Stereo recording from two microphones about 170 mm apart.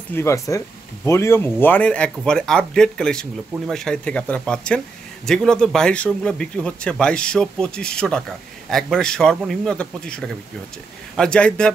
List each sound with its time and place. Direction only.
0.1 s speech: 15° left (ahead or behind)